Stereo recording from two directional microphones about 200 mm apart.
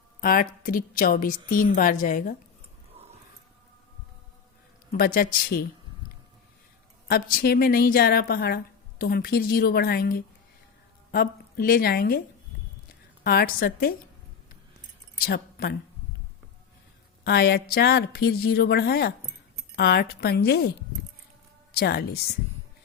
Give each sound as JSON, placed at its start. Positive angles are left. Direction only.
{"t": 0.2, "sound": "a woman's voice", "side_deg": 45}
{"t": 4.9, "sound": "a woman's voice", "side_deg": 50}
{"t": 7.1, "sound": "a woman's voice", "side_deg": 45}
{"t": 13.2, "sound": "a woman's voice", "side_deg": 50}
{"t": 15.2, "sound": "a woman's voice", "side_deg": 50}
{"t": 17.2, "sound": "a woman's voice", "side_deg": 50}